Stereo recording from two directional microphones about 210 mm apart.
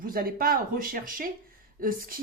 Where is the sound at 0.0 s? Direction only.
45° right (ahead or behind).